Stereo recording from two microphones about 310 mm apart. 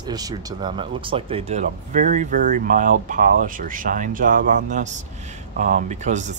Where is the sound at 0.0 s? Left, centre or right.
Centre.